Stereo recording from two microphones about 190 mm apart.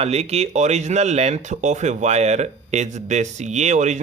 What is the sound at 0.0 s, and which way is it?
Speech, 35° right (ahead or behind).